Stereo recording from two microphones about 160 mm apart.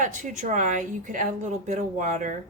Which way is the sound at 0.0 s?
50° right (ahead or behind).